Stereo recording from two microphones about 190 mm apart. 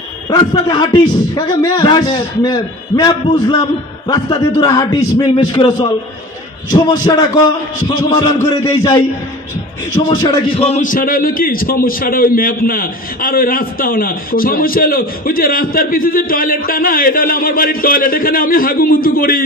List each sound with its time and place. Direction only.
0.3 s a man's voice: 20° left (ahead or behind)
10.0 s a man's voice: 20° left (ahead or behind); by 19.4 s 50° left (ahead or behind)